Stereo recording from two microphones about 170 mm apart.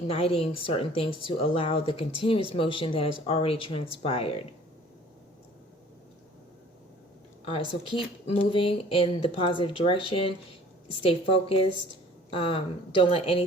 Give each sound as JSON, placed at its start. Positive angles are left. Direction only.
{"t": 0.1, "sound": "speech", "side_deg": 35}
{"t": 7.4, "sound": "speech", "side_deg": 30}